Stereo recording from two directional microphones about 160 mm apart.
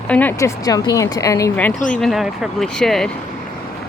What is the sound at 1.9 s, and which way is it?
Speech, centre (ahead or behind).